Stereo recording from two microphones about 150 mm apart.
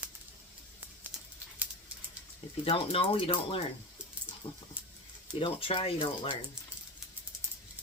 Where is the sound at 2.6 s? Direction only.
40° left (ahead or behind).